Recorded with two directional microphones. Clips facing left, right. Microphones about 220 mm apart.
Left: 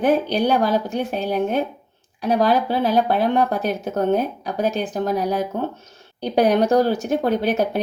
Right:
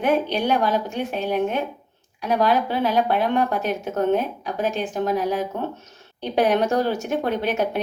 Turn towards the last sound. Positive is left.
turn(degrees=35)  # may be behind; listen again after turning